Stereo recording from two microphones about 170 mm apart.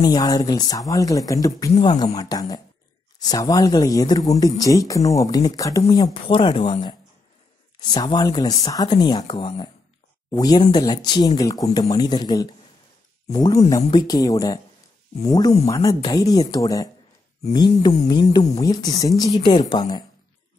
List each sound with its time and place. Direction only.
0.0 s speech: 20° left (ahead or behind)
6.2 s speech: 30° left (ahead or behind)
7.8 s speech: 25° left (ahead or behind)